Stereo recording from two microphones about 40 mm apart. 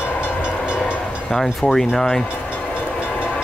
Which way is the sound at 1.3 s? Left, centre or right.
Centre.